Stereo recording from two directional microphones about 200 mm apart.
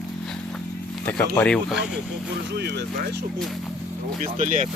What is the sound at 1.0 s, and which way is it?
Speech, 5° left (ahead or behind).